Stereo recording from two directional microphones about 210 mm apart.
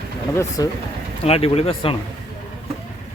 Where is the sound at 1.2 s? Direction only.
30° left (ahead or behind).